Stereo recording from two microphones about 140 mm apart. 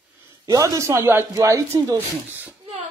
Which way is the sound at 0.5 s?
25° right (ahead or behind).